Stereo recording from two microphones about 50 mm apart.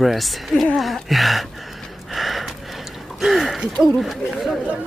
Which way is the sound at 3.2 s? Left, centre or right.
Centre.